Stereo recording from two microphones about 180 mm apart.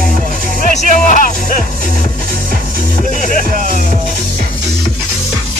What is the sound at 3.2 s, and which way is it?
Music, 45° left (ahead or behind).